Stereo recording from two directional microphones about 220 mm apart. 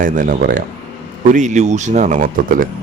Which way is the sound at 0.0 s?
40° right (ahead or behind).